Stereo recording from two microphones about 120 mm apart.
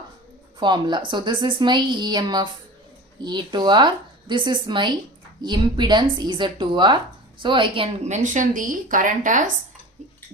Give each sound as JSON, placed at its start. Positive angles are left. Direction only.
{"t": 0.6, "sound": "a woman's voice", "side_deg": -40}
{"t": 8.0, "sound": "speech", "side_deg": -80}